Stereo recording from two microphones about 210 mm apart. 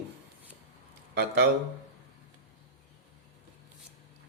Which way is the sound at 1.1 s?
50° right (ahead or behind).